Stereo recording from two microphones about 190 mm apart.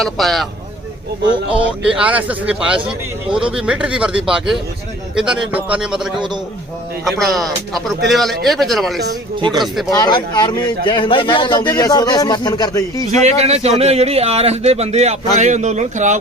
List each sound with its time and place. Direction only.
0.0 s speech: centre (ahead or behind)
2.0 s speech: 5° right (ahead or behind)
9.4 s speech: 20° right (ahead or behind)
9.9 s speech: 20° left (ahead or behind)
13.1 s speech: 35° right (ahead or behind)